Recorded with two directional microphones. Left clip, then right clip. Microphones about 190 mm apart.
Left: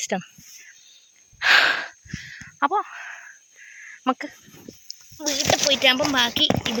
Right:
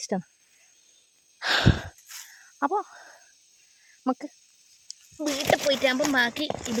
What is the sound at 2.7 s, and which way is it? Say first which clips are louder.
Speech: left 4 dB; 5° right (ahead or behind).